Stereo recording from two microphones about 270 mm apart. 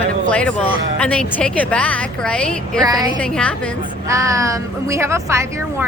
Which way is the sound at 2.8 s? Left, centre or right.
Centre.